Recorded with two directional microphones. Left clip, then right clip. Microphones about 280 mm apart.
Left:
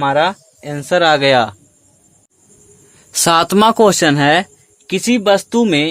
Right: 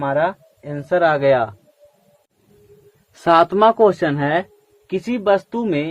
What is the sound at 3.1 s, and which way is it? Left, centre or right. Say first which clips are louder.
Speech: left 1 dB; left.